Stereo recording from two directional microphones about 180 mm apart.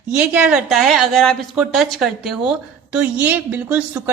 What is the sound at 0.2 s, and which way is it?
A woman's voice, 5° right (ahead or behind).